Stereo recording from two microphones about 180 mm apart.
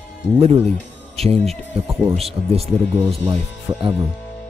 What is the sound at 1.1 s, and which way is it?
Speech, 35° right (ahead or behind).